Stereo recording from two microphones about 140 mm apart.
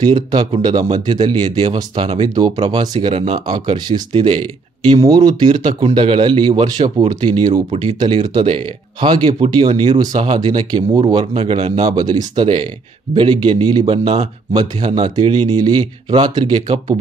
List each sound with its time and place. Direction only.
0.0 s a man's voice: 30° right (ahead or behind)
3.1 s speech: 45° right (ahead or behind)
3.4 s a man's voice: 30° right (ahead or behind)
11.7 s a man's voice: 30° right (ahead or behind)